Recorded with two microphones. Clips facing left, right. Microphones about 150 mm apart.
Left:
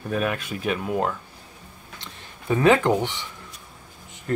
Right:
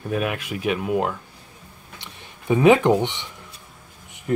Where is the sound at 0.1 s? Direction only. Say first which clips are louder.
Right 1 dB; 10° right (ahead or behind).